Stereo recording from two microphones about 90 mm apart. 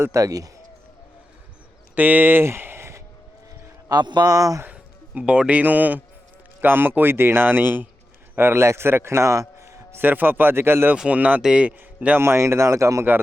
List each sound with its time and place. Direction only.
0.0 s speech: 35° right (ahead or behind)
2.0 s speech: 20° right (ahead or behind)
3.5 s speech: 45° right (ahead or behind)
4.6 s a man's voice: 15° right (ahead or behind)
10.9 s a man's voice: 10° right (ahead or behind)
12.2 s speech: 30° right (ahead or behind)